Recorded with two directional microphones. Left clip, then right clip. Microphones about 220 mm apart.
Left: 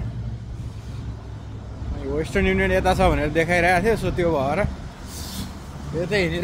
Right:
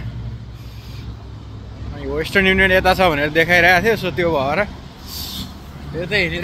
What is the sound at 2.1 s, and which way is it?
Speech, centre (ahead or behind).